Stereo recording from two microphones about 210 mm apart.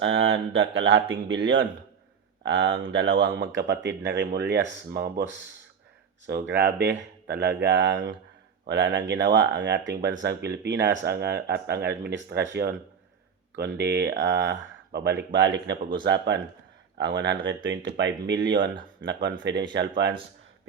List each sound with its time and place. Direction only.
0.0 s speech: 65° right (ahead or behind); by 5.2 s 50° right (ahead or behind)
6.5 s speech: 50° right (ahead or behind)
13.7 s speech: 55° right (ahead or behind)